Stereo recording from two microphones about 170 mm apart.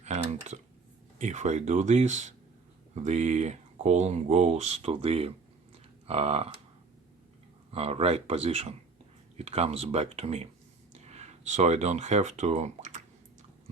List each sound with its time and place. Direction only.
0.0 s computer keyboard: 40° right (ahead or behind)
1.2 s speech: 45° right (ahead or behind)
5.7 s a sound: 35° right (ahead or behind)
7.7 s speech: 35° right (ahead or behind)